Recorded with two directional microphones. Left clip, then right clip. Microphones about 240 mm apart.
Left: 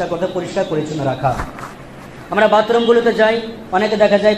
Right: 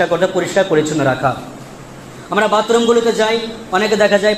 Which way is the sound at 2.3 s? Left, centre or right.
Right.